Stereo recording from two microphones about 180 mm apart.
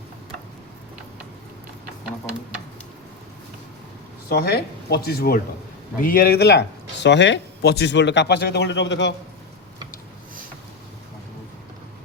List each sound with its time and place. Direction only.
4.3 s speech: 60° left (ahead or behind); by 9.1 s 75° left (ahead or behind)